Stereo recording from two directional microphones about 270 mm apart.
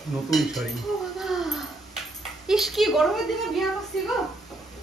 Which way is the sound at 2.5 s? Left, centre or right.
Centre.